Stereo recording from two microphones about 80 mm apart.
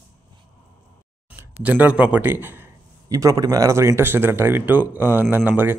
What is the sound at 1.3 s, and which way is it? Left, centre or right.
A man's voice, centre.